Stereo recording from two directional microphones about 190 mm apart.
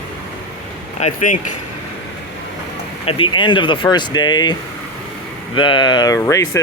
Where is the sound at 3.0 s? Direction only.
30° left (ahead or behind).